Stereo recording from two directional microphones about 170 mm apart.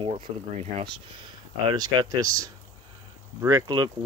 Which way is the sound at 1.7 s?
25° right (ahead or behind).